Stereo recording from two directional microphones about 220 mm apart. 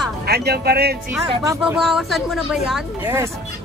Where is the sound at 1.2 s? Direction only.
20° right (ahead or behind).